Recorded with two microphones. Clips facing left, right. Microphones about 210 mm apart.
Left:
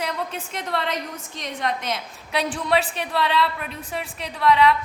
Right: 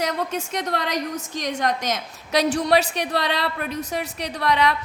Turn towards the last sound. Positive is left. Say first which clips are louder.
# left 3 dB
turn(degrees=-40)  # may be behind; listen again after turning